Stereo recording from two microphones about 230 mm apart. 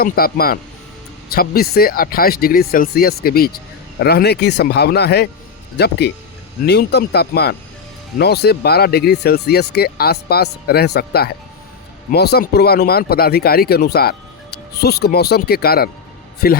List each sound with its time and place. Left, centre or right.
0.0 s speech: left